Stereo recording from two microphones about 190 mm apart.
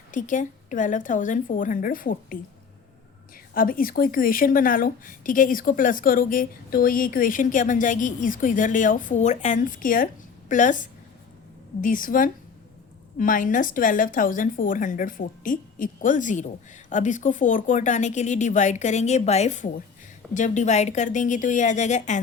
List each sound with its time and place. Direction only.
0.1 s a woman's voice: 45° left (ahead or behind)
3.5 s a woman's voice: 50° left (ahead or behind)